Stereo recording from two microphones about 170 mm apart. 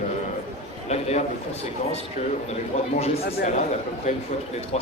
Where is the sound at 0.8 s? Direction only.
40° left (ahead or behind).